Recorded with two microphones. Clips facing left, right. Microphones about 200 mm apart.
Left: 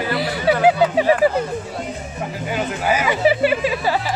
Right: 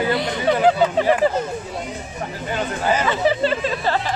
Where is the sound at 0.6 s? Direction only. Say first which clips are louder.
Left 1 dB; 10° left (ahead or behind).